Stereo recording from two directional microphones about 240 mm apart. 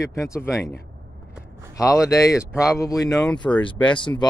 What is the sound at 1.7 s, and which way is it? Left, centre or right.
Speech, centre.